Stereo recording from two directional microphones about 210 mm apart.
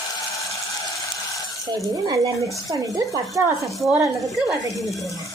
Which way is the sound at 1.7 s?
15° right (ahead or behind).